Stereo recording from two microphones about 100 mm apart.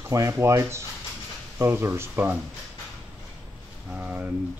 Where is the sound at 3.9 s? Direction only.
15° right (ahead or behind).